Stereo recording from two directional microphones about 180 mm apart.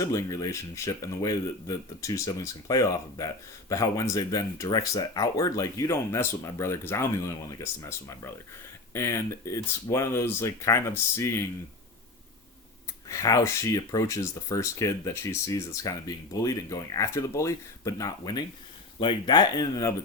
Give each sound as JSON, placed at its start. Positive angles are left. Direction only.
{"t": 0.0, "sound": "speech", "side_deg": 20}
{"t": 13.1, "sound": "speech", "side_deg": 15}